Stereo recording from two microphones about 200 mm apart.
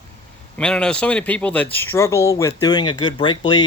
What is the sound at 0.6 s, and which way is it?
Speech, 5° left (ahead or behind).